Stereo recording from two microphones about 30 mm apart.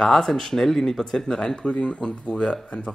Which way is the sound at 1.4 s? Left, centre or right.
Left.